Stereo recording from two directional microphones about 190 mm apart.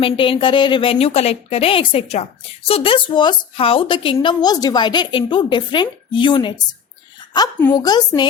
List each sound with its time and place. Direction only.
0.0 s speech: 25° left (ahead or behind)